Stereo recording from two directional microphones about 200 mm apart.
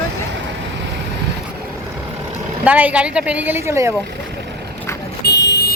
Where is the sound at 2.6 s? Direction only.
5° right (ahead or behind).